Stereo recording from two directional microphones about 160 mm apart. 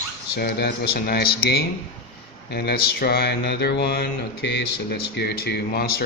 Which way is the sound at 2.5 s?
75° left (ahead or behind).